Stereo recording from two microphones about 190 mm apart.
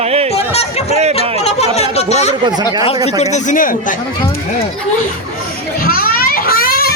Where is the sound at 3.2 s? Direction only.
40° left (ahead or behind).